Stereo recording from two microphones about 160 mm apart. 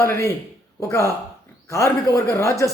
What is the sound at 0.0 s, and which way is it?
A man's voice, 15° left (ahead or behind).